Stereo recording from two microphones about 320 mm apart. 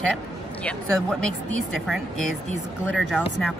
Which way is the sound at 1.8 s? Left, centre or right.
Centre.